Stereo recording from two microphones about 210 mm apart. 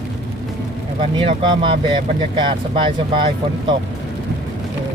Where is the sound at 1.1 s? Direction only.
25° right (ahead or behind).